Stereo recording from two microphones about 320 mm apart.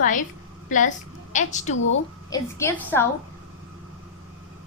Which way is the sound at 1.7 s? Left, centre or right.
Left.